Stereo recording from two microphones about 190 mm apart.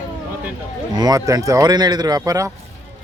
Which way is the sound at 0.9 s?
20° right (ahead or behind).